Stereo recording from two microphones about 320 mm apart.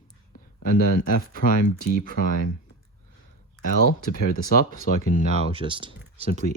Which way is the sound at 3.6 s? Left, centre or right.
Left.